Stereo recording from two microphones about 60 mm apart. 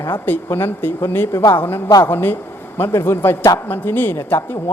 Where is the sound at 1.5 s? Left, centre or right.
Left.